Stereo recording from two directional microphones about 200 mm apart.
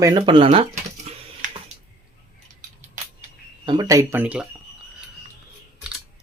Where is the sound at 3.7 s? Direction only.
20° right (ahead or behind).